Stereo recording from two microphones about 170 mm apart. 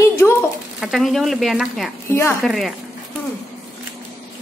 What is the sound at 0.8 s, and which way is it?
Speech, centre (ahead or behind).